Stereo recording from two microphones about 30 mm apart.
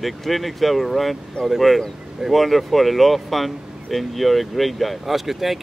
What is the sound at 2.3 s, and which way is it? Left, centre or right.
Speech, centre.